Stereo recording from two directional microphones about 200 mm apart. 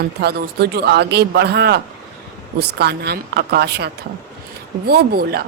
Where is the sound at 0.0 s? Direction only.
55° right (ahead or behind).